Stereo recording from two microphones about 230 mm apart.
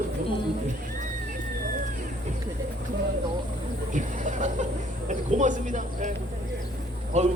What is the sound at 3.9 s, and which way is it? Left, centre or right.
Speech, right.